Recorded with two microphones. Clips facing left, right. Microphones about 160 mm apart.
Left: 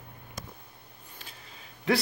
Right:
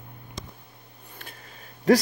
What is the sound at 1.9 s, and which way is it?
Speech, 40° right (ahead or behind).